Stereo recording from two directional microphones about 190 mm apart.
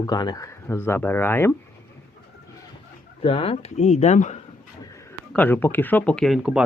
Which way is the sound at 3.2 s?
30° left (ahead or behind).